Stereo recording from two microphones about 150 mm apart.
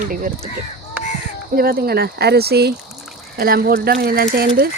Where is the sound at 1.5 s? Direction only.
85° right.